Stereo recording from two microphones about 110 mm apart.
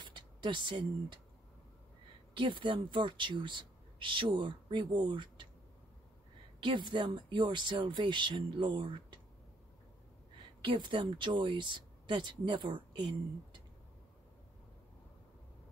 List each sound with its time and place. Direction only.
0.0 s speech: 45° right (ahead or behind)
2.3 s speech: 50° right (ahead or behind)
6.6 s a woman's voice: 45° right (ahead or behind)
10.6 s a woman's voice: 50° right (ahead or behind)